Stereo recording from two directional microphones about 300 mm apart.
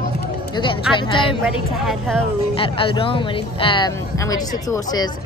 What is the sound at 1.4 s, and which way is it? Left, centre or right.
Speech, centre.